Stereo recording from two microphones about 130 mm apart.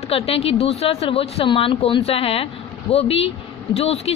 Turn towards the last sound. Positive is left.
turn(degrees=50)  # may be behind; listen again after turning